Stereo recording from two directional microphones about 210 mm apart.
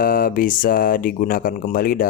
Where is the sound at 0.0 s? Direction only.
40° left (ahead or behind).